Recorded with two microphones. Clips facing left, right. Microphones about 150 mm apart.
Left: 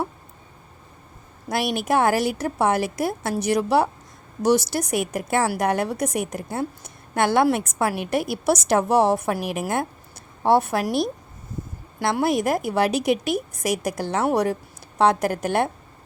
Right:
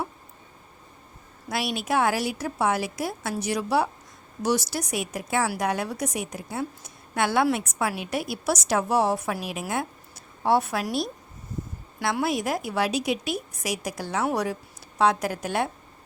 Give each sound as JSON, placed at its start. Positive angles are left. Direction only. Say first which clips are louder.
{"t": 1.5, "sound": "a woman's voice", "louder": "left 5 dB", "side_deg": 50}
{"t": 11.9, "sound": "a woman's voice", "louder": "left 4 dB", "side_deg": 45}